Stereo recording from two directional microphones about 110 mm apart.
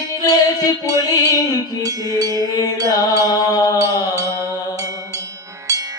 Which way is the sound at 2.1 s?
35° right (ahead or behind).